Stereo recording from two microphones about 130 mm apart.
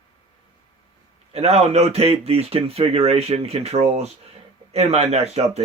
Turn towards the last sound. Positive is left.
turn(degrees=-55)  # may be behind; listen again after turning